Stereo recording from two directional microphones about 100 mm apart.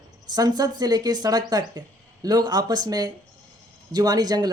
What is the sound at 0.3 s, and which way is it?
Speech, 40° right (ahead or behind).